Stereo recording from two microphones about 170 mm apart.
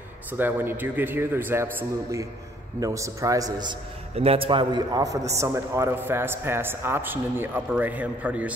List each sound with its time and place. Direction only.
0.3 s a man's voice: 10° right (ahead or behind)
4.1 s a man's voice: 35° right (ahead or behind); by 8.5 s 10° right (ahead or behind)